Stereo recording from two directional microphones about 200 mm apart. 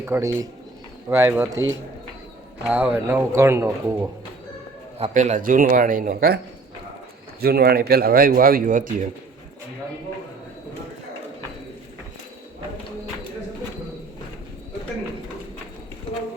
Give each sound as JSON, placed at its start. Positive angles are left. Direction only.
{"t": 0.0, "sound": "speech", "side_deg": -15}
{"t": 2.6, "sound": "speech", "side_deg": -10}
{"t": 4.9, "sound": "speech", "side_deg": -35}
{"t": 7.4, "sound": "speech", "side_deg": -50}